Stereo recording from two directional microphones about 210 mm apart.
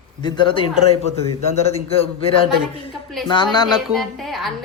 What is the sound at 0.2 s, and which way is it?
Speech, 20° left (ahead or behind).